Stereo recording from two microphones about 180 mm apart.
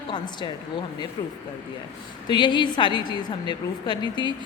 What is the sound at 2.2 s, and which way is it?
A man's voice, 25° left (ahead or behind).